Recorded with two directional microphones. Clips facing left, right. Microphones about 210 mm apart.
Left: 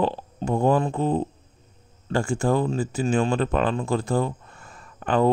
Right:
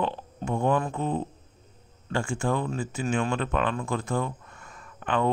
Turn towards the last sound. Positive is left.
turn(degrees=35)  # may be behind; listen again after turning